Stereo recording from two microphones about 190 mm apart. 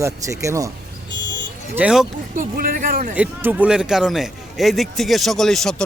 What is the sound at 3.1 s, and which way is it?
Speech, 10° right (ahead or behind).